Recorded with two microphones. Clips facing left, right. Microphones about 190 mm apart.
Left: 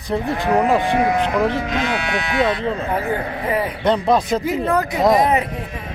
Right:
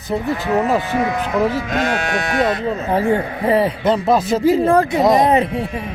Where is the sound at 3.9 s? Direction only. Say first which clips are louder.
Left 2 dB; 5° right (ahead or behind).